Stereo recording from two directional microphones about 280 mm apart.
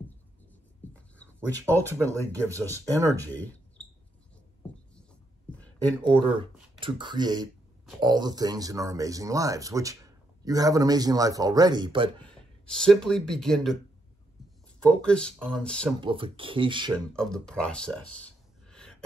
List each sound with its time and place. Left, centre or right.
0.9 s a sound: centre
1.8 s speech: centre
6.0 s speech: centre
12.2 s speech: centre
15.0 s speech: centre
16.0 s speech: centre
17.1 s speech: centre